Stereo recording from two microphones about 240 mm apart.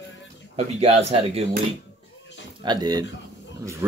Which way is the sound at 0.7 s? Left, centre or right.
Right.